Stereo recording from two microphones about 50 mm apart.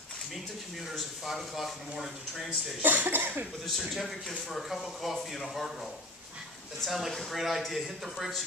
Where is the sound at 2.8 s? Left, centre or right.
Right.